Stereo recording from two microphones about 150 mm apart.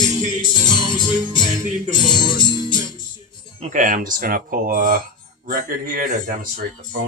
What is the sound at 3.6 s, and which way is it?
Speech, 55° right (ahead or behind).